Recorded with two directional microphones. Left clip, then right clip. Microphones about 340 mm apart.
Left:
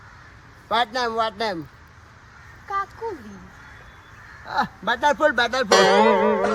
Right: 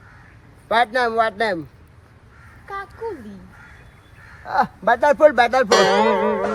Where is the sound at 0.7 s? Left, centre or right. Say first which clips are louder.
Right 4 dB; centre.